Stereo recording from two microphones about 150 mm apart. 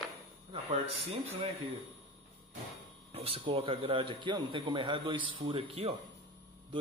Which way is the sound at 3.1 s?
40° right (ahead or behind).